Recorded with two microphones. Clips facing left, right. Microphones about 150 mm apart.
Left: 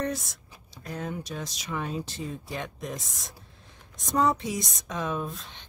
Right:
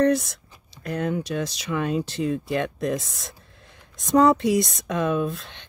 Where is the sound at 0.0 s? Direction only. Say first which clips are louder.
Right 11 dB; 70° right (ahead or behind).